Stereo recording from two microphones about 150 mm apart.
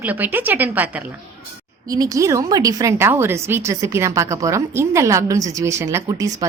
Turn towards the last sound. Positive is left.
turn(degrees=-25)  # may be behind; listen again after turning